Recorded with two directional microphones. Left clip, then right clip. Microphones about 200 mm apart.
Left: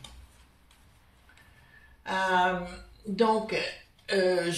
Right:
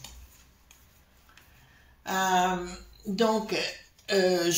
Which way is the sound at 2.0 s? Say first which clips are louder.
Right 1 dB; 45° right (ahead or behind).